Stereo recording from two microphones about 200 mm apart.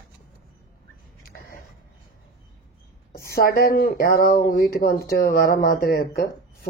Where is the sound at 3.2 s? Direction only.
50° left (ahead or behind).